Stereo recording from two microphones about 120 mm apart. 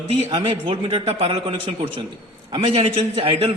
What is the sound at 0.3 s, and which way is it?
A man's voice, 45° right (ahead or behind).